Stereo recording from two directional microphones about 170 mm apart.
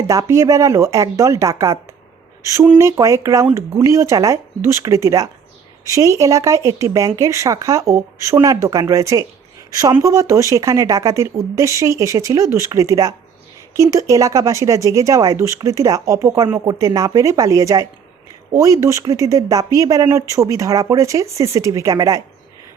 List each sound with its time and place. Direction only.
0.1 s speech: 20° right (ahead or behind)